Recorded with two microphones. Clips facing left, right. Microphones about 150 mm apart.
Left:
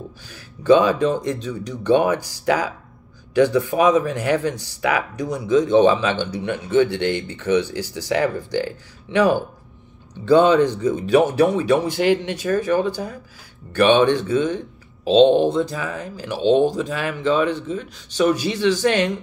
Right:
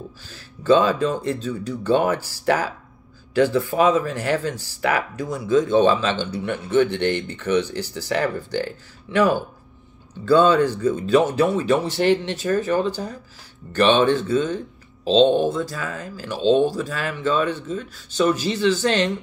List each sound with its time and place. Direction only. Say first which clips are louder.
0.3 s speech: left 2 dB; 15° left (ahead or behind)